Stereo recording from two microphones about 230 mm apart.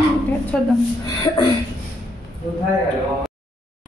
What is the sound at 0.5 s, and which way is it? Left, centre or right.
Speech, centre.